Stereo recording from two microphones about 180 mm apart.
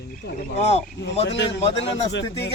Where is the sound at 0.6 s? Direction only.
35° left (ahead or behind).